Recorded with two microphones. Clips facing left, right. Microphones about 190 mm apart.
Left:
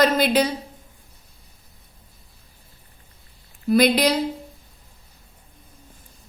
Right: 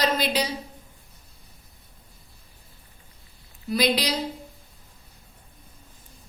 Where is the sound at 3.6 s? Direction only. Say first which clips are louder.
Left 7 dB; 55° left (ahead or behind).